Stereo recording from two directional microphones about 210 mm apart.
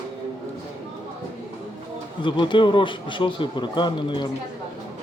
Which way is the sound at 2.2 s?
25° left (ahead or behind).